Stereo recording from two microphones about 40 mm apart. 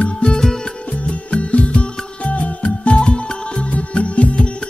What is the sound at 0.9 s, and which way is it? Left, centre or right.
Music, left.